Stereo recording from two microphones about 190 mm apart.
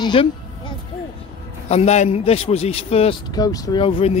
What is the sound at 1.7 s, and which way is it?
A man's voice, 35° left (ahead or behind).